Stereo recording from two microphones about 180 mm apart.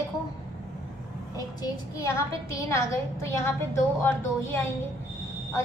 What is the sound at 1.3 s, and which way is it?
A woman's voice, 20° left (ahead or behind).